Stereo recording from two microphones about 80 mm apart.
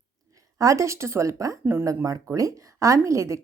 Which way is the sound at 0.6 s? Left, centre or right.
Right.